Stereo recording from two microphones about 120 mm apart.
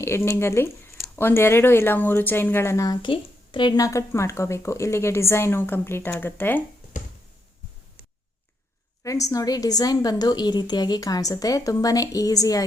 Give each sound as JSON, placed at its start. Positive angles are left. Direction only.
{"t": 0.0, "sound": "speech", "side_deg": 20}
{"t": 6.9, "sound": "a sound", "side_deg": 90}
{"t": 9.0, "sound": "a woman's voice", "side_deg": 30}